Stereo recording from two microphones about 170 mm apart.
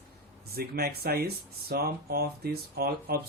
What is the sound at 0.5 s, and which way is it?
Speech, 65° right (ahead or behind).